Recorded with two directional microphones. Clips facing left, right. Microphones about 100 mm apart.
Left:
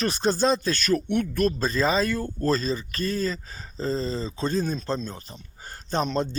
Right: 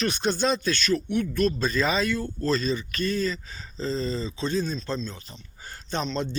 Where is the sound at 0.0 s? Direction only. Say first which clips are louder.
Left 2 dB; 35° left (ahead or behind).